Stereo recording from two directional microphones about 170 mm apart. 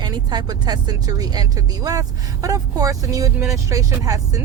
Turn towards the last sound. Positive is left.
turn(degrees=-20)  # may be behind; listen again after turning